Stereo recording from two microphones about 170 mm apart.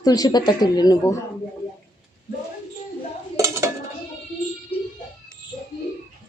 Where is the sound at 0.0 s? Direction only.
25° left (ahead or behind).